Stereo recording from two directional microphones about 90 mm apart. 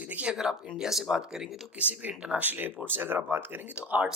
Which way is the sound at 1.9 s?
15° right (ahead or behind).